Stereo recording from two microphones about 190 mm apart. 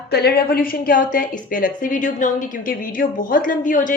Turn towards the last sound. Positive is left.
turn(degrees=45)  # may be behind; listen again after turning